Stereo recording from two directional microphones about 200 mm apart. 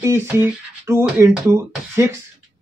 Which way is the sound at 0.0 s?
10° right (ahead or behind).